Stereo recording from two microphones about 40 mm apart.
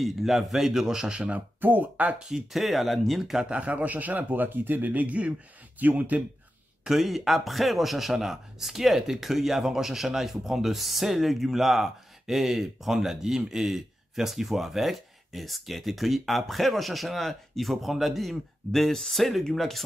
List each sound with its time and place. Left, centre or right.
0.0 s a man's voice: centre; by 1.3 s right
1.6 s a man's voice: right
2.1 s a man's voice: centre
2.6 s speech: centre
3.4 s a man's voice: right
7.0 s speech: centre